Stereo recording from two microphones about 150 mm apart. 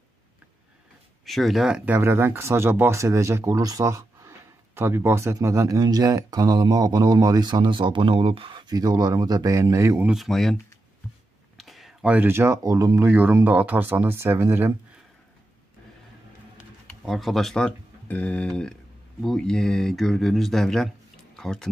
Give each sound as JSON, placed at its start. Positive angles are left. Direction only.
{"t": 1.2, "sound": "speech", "side_deg": 0}
{"t": 2.0, "sound": "speech", "side_deg": -15}
{"t": 10.0, "sound": "speech", "side_deg": 0}
{"t": 17.0, "sound": "speech", "side_deg": 0}